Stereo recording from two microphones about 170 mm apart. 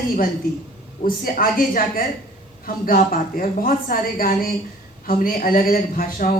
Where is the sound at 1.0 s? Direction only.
60° left (ahead or behind).